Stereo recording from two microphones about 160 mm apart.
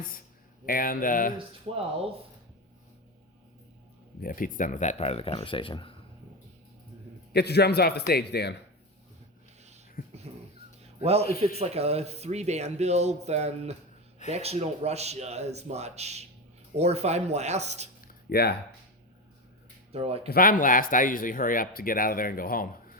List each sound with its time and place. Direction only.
0.6 s speech: 65° left (ahead or behind)
4.2 s speech: 60° left (ahead or behind); by 5.9 s 35° left (ahead or behind)
7.3 s a man's voice: 90° left
10.0 s a sound: 65° left (ahead or behind)
11.0 s speech: 40° right (ahead or behind)
18.0 s a sound: 65° left (ahead or behind)
19.9 s speech: 40° right (ahead or behind)
20.2 s speech: 65° left (ahead or behind)